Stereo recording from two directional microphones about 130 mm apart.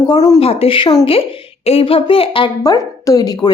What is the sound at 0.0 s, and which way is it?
Speech, 30° left (ahead or behind).